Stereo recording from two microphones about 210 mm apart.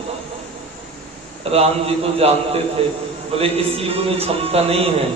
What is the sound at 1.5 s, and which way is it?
Speech, 30° right (ahead or behind).